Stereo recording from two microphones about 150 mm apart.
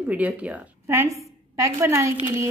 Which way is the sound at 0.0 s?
10° right (ahead or behind).